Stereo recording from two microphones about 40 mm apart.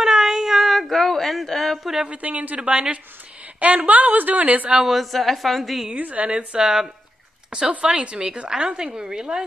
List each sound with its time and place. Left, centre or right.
0.0 s a sound: centre
1.3 s speech: centre
1.8 s speech: centre
2.0 s a woman's voice: right
3.5 s a woman's voice: right
4.8 s a woman's voice: centre
5.9 s a woman's voice: right
6.2 s a woman's voice: right
6.6 s speech: centre
7.8 s a woman's voice: right